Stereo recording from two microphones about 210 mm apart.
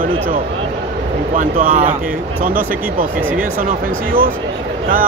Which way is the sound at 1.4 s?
40° right (ahead or behind).